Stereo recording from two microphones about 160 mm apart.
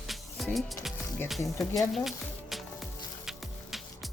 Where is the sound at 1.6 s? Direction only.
Centre (ahead or behind).